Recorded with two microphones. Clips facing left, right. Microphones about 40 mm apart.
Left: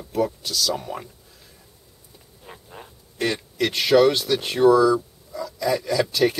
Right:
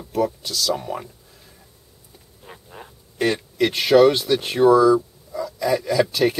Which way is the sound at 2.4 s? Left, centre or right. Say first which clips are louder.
Right 1 dB; centre.